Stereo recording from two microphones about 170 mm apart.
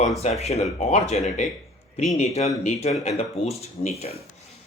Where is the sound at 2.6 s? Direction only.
40° left (ahead or behind).